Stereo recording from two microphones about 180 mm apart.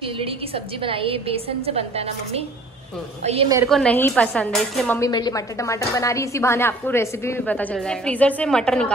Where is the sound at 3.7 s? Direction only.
5° left (ahead or behind).